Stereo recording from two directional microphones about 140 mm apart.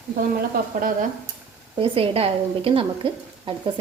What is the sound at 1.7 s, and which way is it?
A woman's voice, 40° right (ahead or behind).